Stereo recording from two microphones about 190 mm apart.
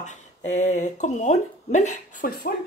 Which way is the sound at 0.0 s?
40° left (ahead or behind).